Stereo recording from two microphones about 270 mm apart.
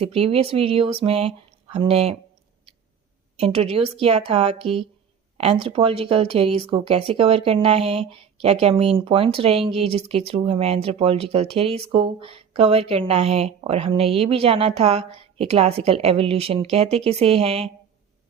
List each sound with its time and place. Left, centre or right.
0.0 s speech: right
3.3 s speech: right